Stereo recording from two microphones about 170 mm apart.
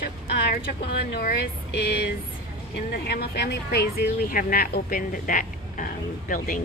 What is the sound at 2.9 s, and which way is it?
Speech, 70° left (ahead or behind).